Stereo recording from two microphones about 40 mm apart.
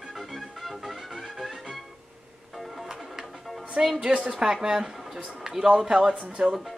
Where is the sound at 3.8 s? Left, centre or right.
Centre.